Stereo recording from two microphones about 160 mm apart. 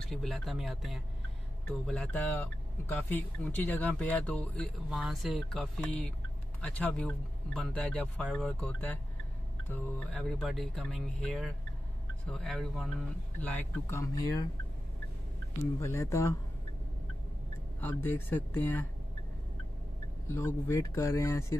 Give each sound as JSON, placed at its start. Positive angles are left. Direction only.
{"t": 0.1, "sound": "speech", "side_deg": 0}
{"t": 4.8, "sound": "speech", "side_deg": 0}
{"t": 15.8, "sound": "speech", "side_deg": 20}
{"t": 17.7, "sound": "speech", "side_deg": 10}
{"t": 20.2, "sound": "speech", "side_deg": 15}